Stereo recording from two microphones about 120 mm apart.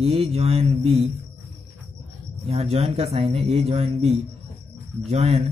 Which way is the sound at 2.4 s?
55° right (ahead or behind).